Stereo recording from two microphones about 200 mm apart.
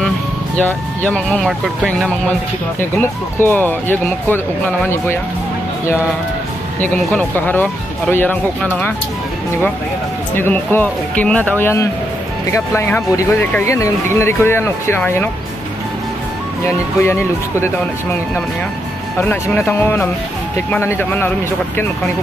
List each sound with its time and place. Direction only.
0.6 s speech: 5° left (ahead or behind)
6.8 s speech: 10° left (ahead or behind)
10.3 s speech: 10° left (ahead or behind)
16.6 s speech: 10° left (ahead or behind)
19.2 s speech: 10° left (ahead or behind)